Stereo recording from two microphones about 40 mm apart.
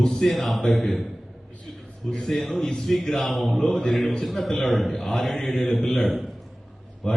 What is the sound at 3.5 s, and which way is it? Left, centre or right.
Mantra, centre.